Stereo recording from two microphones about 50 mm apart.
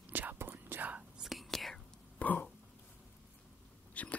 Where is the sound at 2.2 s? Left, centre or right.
Left.